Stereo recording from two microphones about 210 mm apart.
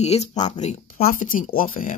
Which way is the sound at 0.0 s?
30° left (ahead or behind).